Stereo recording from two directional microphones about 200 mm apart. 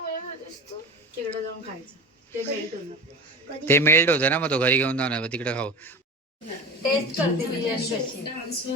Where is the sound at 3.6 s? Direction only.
10° left (ahead or behind).